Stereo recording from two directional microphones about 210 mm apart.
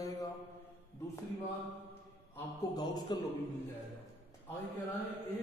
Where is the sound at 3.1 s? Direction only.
20° left (ahead or behind).